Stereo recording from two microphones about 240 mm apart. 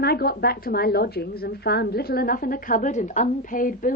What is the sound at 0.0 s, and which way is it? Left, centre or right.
A woman's voice, left.